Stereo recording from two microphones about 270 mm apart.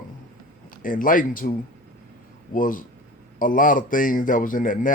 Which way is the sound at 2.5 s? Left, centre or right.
Left.